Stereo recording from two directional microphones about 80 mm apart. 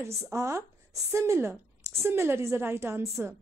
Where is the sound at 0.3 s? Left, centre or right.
Right.